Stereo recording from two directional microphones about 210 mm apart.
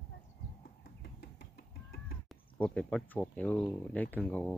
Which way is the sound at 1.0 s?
50° left (ahead or behind).